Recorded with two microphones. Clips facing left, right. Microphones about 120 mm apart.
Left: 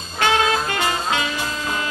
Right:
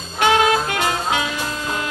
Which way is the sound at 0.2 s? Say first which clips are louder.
Right 3 dB; 10° right (ahead or behind).